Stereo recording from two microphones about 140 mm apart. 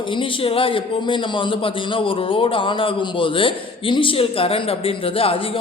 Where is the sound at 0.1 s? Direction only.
40° left (ahead or behind).